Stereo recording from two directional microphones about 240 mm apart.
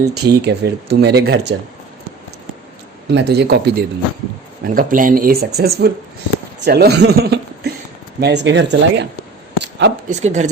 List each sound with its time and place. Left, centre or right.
0.1 s speech: right
3.1 s a man's voice: right
9.6 s a sound: right
10.1 s speech: right